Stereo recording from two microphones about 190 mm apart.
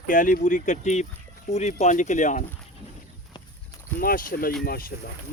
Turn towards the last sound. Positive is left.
turn(degrees=50)  # may be behind; listen again after turning